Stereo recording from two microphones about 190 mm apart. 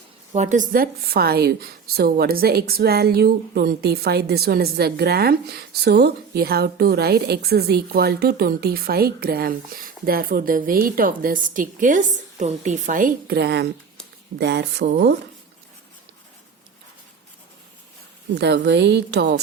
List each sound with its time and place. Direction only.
0.3 s a woman's voice: 40° right (ahead or behind)
18.3 s a woman's voice: 65° right (ahead or behind)